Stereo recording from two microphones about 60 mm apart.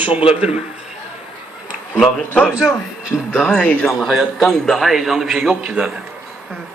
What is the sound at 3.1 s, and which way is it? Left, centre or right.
Speech, left.